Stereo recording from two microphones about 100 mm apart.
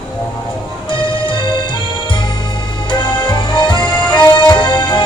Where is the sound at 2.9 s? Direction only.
50° left (ahead or behind).